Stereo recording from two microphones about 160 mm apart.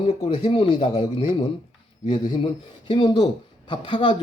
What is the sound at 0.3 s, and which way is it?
Speech, 35° left (ahead or behind).